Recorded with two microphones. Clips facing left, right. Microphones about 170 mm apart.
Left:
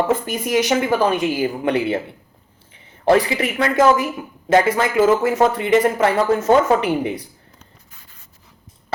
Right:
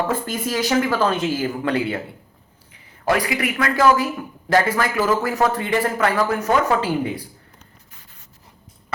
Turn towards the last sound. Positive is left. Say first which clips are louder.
# left 3 dB
turn(degrees=20)  # may be behind; listen again after turning